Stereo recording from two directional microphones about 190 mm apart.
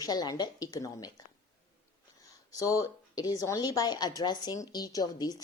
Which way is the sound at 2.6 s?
15° left (ahead or behind).